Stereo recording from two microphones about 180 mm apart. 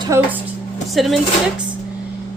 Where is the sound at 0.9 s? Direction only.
Centre (ahead or behind).